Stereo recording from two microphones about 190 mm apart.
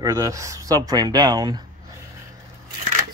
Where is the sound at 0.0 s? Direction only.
15° right (ahead or behind).